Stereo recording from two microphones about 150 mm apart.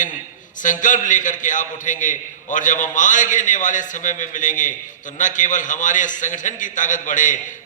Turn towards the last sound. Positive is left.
turn(degrees=60)  # may be behind; listen again after turning